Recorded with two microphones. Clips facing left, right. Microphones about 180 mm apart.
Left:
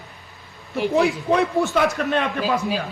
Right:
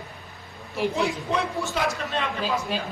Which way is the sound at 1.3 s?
60° left (ahead or behind).